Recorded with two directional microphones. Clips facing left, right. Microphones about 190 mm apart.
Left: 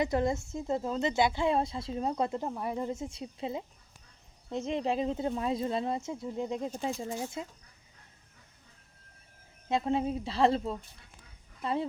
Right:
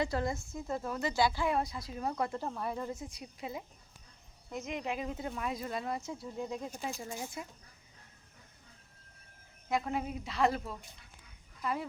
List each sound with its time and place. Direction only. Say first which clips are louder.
0.0 s a woman's voice: left 5 dB; 20° left (ahead or behind)
9.6 s a woman's voice: left 5 dB; 25° left (ahead or behind)